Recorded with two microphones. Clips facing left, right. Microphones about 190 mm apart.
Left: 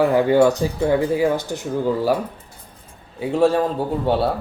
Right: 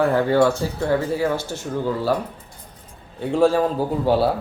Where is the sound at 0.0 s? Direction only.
15° left (ahead or behind).